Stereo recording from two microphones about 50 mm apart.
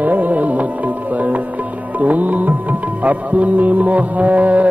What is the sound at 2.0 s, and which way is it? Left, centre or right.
Music, right.